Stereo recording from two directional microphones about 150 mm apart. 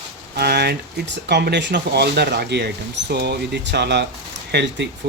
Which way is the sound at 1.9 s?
90° right.